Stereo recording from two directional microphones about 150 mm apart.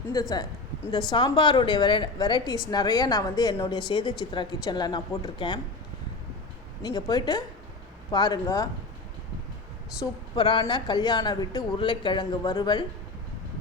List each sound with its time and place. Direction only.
0.1 s a woman's voice: 25° left (ahead or behind)
6.8 s a woman's voice: 30° left (ahead or behind)
10.3 s speech: 35° left (ahead or behind)